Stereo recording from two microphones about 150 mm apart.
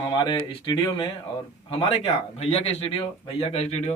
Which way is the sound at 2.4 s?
45° left (ahead or behind).